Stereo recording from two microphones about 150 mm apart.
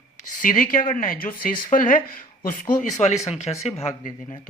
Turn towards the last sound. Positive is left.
turn(degrees=45)  # may be behind; listen again after turning